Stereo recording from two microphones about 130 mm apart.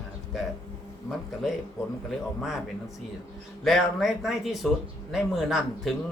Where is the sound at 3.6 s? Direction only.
Centre (ahead or behind).